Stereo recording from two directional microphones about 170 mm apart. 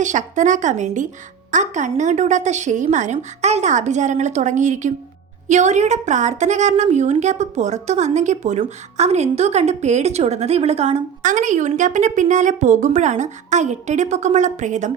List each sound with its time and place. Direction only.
0.0 s a woman's voice: 45° right (ahead or behind)